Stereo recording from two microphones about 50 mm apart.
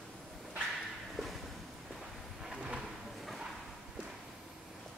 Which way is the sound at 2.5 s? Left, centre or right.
Centre.